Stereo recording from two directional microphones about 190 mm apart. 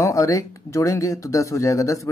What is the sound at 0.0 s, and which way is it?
Speech, 15° left (ahead or behind).